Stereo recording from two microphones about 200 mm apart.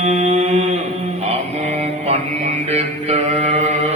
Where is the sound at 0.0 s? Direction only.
35° right (ahead or behind).